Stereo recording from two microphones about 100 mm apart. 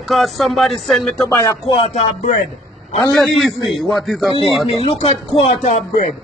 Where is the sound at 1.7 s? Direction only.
85° left.